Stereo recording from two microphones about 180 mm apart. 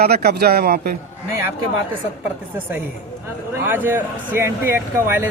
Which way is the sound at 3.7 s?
10° right (ahead or behind).